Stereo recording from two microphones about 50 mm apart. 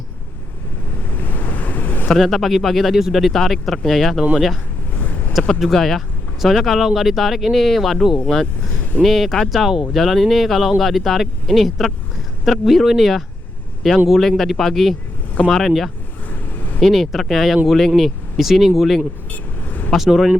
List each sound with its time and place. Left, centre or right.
1.1 s waves: left
2.1 s speech: centre
5.3 s speech: centre
19.3 s vehicle: left
20.0 s speech: centre